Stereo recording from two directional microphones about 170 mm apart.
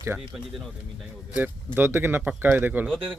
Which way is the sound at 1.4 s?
10° right (ahead or behind).